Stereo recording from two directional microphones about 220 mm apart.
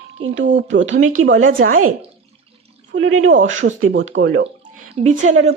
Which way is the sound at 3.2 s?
60° right (ahead or behind).